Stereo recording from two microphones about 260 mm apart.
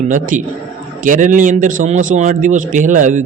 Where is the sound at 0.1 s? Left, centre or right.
Right.